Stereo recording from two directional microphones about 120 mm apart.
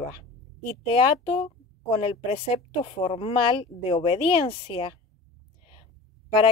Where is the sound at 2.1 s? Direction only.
55° left (ahead or behind).